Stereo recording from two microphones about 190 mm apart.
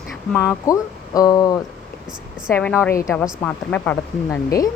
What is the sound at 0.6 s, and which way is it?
A woman's voice, 20° left (ahead or behind).